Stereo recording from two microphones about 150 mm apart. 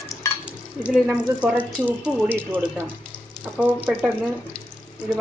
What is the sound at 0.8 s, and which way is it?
Speech, 5° right (ahead or behind).